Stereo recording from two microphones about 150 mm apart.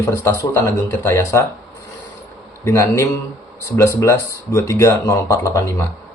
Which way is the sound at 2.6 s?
20° left (ahead or behind).